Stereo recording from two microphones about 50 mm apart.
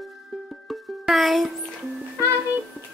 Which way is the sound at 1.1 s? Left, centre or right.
Centre.